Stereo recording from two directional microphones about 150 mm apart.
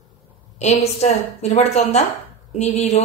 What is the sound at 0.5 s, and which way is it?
A woman's voice, 50° left (ahead or behind).